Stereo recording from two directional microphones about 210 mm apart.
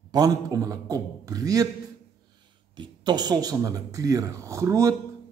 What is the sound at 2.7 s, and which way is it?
A man's voice, 20° right (ahead or behind).